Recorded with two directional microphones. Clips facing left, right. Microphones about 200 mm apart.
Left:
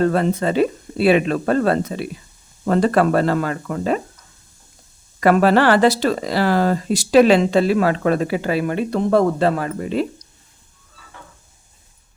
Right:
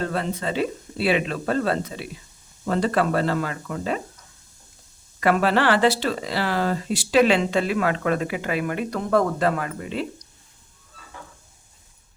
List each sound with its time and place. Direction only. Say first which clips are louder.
0.0 s speech: left 8 dB; 50° left (ahead or behind)
5.2 s speech: left 6 dB; 45° left (ahead or behind)